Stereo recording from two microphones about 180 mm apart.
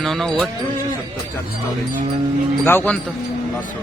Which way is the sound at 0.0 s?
Centre (ahead or behind).